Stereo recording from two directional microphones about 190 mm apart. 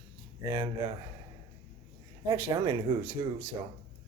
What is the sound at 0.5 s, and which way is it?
Speech, 25° right (ahead or behind).